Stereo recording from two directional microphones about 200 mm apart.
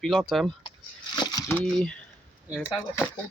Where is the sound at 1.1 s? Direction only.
20° left (ahead or behind).